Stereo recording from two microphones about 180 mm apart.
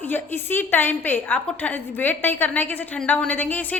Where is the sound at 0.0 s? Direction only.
10° left (ahead or behind).